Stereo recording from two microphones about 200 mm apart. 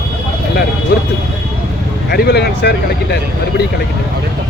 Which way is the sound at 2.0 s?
55° left (ahead or behind).